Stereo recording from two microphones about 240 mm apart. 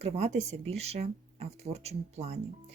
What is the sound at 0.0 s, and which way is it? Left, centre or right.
Speech, right.